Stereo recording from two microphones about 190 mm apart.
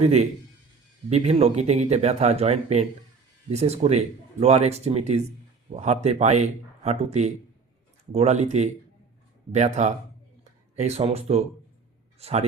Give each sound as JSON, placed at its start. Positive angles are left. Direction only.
{"t": 0.0, "sound": "speech", "side_deg": -35}